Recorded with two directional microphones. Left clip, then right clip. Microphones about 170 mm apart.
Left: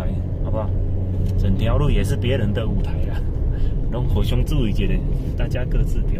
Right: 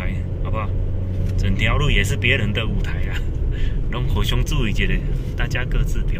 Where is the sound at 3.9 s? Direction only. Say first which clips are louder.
Right 1 dB; 45° right (ahead or behind).